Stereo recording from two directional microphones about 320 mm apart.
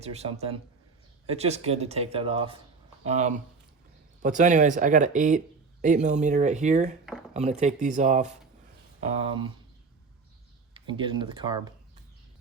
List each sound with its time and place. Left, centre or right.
0.0 s speech: centre
10.8 s speech: centre